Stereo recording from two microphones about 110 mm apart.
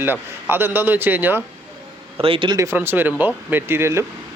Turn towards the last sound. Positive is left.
turn(degrees=-25)  # may be behind; listen again after turning